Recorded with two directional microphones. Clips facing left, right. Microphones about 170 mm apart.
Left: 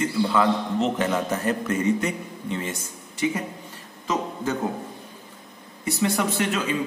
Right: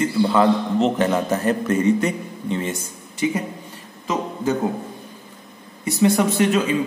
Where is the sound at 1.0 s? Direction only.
35° right (ahead or behind).